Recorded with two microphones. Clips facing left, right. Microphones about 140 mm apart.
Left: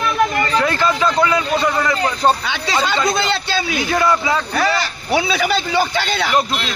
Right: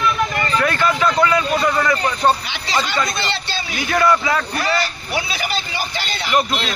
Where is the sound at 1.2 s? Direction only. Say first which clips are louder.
Right 1 dB; 15° left (ahead or behind).